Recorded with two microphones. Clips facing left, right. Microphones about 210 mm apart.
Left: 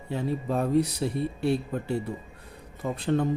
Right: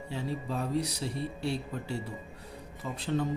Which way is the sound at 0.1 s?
55° left (ahead or behind).